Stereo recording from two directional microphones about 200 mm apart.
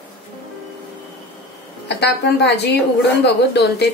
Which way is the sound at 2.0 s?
55° left (ahead or behind).